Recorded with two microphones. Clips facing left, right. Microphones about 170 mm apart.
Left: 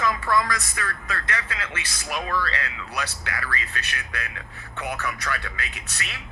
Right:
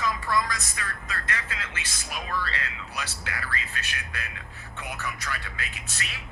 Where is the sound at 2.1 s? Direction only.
65° left (ahead or behind).